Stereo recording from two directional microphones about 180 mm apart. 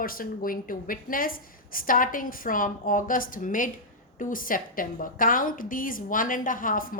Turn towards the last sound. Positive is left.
turn(degrees=50)  # may be behind; listen again after turning